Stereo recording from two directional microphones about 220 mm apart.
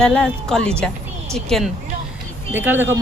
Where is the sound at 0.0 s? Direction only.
5° left (ahead or behind).